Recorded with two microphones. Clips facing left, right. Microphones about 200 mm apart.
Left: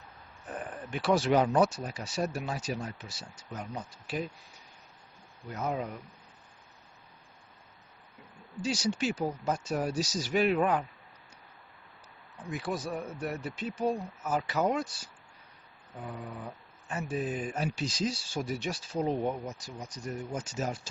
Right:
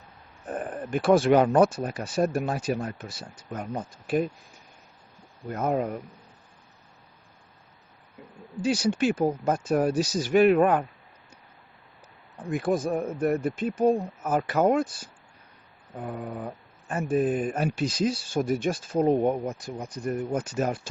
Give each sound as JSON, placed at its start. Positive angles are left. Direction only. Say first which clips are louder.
{"t": 0.4, "sound": "speech", "louder": "right 7 dB", "side_deg": -45}
{"t": 5.5, "sound": "speech", "louder": "right 7 dB", "side_deg": -55}
{"t": 8.6, "sound": "speech", "louder": "right 7 dB", "side_deg": -55}
{"t": 12.5, "sound": "speech", "louder": "right 9 dB", "side_deg": -50}